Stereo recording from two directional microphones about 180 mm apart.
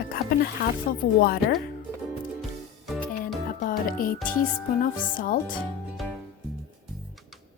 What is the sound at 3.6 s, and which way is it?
Music, 50° left (ahead or behind).